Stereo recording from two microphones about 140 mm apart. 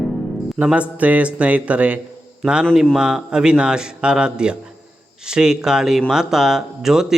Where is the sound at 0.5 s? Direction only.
10° right (ahead or behind).